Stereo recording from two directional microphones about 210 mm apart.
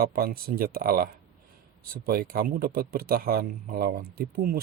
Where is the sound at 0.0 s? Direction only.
45° right (ahead or behind).